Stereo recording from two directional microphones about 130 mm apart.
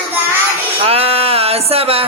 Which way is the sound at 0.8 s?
50° right (ahead or behind).